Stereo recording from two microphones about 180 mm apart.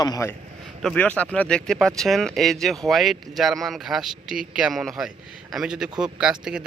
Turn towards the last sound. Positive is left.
turn(degrees=-5)  # may be behind; listen again after turning